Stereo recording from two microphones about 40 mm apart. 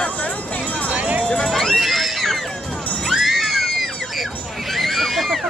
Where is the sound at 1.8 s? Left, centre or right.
Centre.